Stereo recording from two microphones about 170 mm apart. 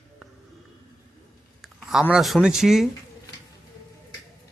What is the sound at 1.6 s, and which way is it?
Speech, centre (ahead or behind).